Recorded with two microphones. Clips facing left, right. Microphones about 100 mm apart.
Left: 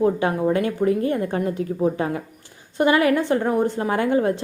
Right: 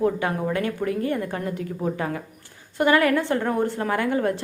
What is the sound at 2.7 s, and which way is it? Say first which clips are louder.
A woman's voice: left 1 dB; 20° left (ahead or behind).